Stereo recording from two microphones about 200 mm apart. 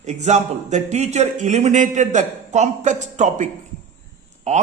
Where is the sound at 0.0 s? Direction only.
35° right (ahead or behind).